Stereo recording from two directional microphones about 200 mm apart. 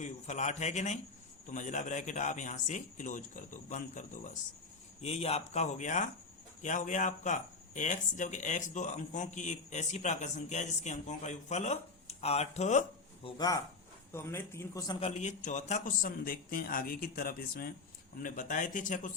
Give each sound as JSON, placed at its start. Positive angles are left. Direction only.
{"t": 0.0, "sound": "a man's voice", "side_deg": 35}
{"t": 13.2, "sound": "a man's voice", "side_deg": 20}
{"t": 15.0, "sound": "a man's voice", "side_deg": 35}